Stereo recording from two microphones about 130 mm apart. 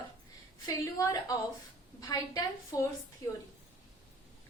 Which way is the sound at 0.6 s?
25° left (ahead or behind).